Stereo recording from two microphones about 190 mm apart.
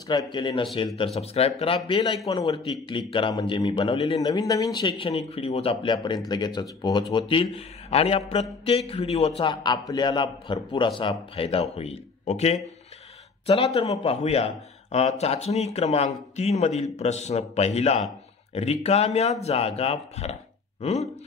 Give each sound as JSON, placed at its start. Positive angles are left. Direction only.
{"t": 0.1, "sound": "speech", "side_deg": 25}
{"t": 13.7, "sound": "speech", "side_deg": 30}